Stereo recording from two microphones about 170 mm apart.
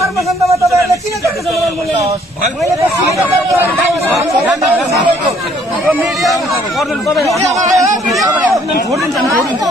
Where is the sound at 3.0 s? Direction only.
15° right (ahead or behind).